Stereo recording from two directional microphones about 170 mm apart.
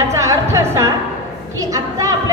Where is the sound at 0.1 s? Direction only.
20° right (ahead or behind).